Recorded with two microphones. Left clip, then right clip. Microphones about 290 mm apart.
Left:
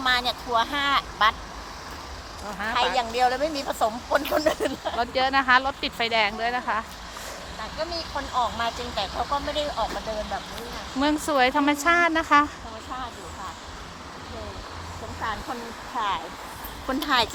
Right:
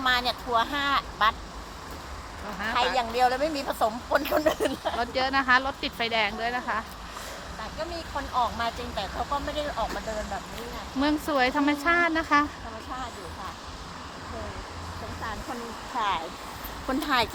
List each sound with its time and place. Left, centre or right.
0.0 s speech: centre
2.6 s speech: centre
4.9 s speech: centre
7.8 s speech: centre
11.0 s speech: centre
16.0 s speech: centre